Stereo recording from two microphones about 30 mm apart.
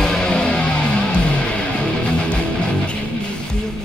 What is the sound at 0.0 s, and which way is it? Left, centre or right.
Music, left.